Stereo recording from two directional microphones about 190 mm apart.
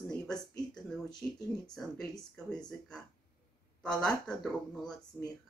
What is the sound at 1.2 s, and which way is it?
Speech, 5° left (ahead or behind).